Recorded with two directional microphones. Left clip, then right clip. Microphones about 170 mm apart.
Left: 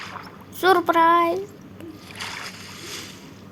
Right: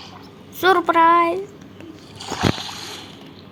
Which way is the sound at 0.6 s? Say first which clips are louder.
Right 2 dB; centre (ahead or behind).